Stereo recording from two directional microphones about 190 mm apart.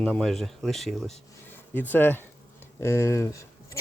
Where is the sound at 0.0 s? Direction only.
5° left (ahead or behind).